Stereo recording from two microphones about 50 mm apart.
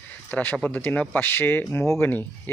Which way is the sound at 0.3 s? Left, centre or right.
Left.